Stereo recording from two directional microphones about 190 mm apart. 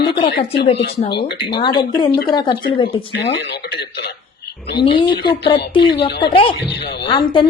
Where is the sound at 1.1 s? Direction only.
60° left (ahead or behind).